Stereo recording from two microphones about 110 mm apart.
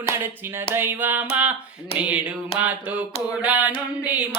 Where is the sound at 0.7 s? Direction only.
20° right (ahead or behind).